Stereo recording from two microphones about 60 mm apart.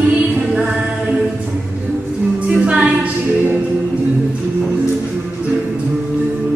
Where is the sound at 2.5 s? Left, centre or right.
Centre.